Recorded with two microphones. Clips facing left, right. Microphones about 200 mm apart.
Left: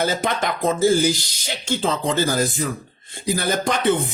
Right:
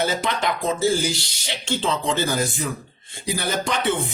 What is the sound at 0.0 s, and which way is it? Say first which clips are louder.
Speech: left 1 dB; 45° left (ahead or behind).